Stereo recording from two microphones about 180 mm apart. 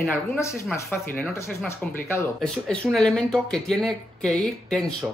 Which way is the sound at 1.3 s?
15° left (ahead or behind).